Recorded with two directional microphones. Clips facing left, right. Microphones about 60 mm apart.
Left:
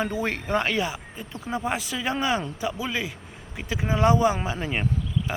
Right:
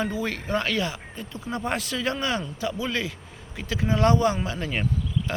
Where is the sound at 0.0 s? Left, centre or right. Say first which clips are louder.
Left 1 dB; left.